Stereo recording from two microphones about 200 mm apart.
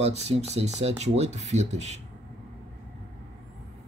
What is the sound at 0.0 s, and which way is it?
Speech, 30° right (ahead or behind).